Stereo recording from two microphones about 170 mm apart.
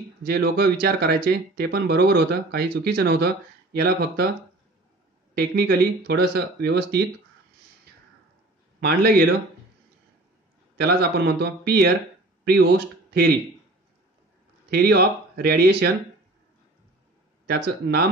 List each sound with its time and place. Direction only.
0.2 s speech: 65° right (ahead or behind)
5.3 s speech: 65° right (ahead or behind)
8.8 s speech: 65° right (ahead or behind)
10.8 s speech: 70° right (ahead or behind)
14.7 s speech: 65° right (ahead or behind)
17.5 s speech: 65° right (ahead or behind)